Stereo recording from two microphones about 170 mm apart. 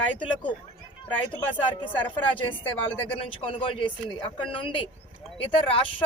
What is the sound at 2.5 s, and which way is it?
Speech, 30° left (ahead or behind).